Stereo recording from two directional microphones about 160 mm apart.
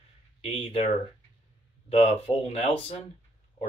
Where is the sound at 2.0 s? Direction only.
40° left (ahead or behind).